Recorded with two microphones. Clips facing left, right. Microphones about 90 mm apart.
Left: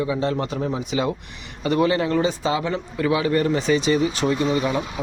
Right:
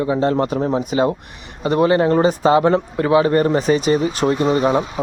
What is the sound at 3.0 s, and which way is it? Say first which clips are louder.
Speech: right 4 dB; 35° right (ahead or behind).